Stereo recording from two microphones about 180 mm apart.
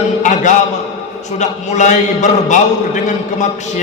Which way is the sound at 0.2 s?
45° left (ahead or behind).